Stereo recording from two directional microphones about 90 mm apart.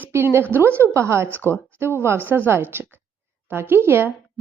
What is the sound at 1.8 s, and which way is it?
Speech, 25° right (ahead or behind).